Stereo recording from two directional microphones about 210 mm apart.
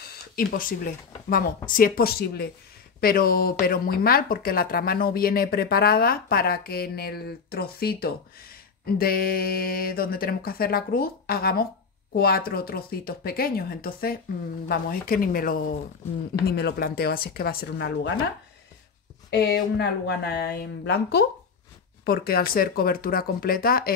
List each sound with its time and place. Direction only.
0.4 s speech: 45° left (ahead or behind)
19.4 s speech: 55° left (ahead or behind)